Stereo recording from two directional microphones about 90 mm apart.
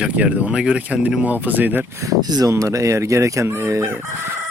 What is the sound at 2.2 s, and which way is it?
Speech, 45° right (ahead or behind).